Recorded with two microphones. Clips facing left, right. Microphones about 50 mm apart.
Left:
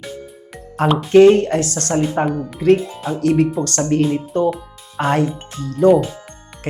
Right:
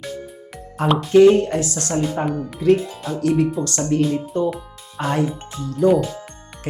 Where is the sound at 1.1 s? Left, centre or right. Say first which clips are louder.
Left 2 dB; left.